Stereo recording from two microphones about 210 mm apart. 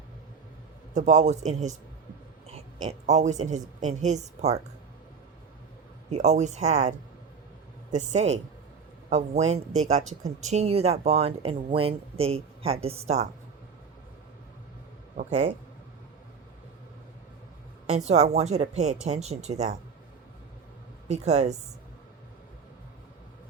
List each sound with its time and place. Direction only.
0.9 s a woman's voice: 35° right (ahead or behind)
6.1 s a woman's voice: 35° right (ahead or behind)
7.9 s a woman's voice: 30° right (ahead or behind)
15.3 s speech: 25° right (ahead or behind)
17.8 s a woman's voice: 30° right (ahead or behind)
21.1 s a woman's voice: 30° right (ahead or behind)